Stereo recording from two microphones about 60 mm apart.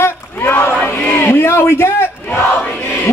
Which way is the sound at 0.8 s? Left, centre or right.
Left.